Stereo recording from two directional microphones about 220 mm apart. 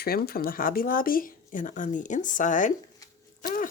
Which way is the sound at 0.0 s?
45° left (ahead or behind).